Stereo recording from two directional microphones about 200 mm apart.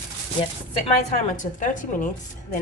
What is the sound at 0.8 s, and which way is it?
A woman's voice, 35° left (ahead or behind).